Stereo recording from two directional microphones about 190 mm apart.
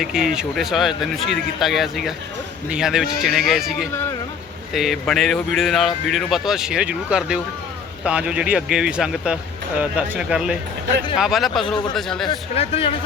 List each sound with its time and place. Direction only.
0.0 s speech: centre (ahead or behind)
12.5 s speech: 30° left (ahead or behind)